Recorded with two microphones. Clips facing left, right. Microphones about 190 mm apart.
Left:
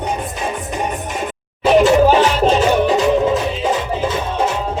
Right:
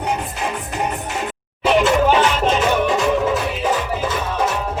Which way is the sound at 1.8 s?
35° left (ahead or behind).